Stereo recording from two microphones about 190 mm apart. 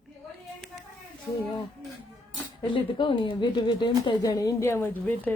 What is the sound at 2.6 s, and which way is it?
A woman's voice, 25° left (ahead or behind).